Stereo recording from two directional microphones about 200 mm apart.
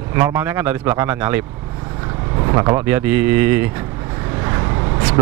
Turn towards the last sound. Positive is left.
turn(degrees=-20)  # may be behind; listen again after turning